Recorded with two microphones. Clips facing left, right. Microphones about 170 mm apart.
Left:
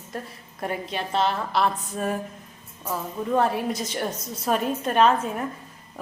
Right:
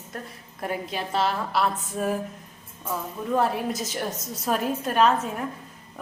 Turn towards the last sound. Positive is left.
turn(degrees=0)  # may be behind; listen again after turning